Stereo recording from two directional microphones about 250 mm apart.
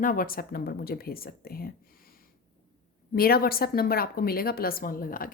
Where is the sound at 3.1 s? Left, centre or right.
Left.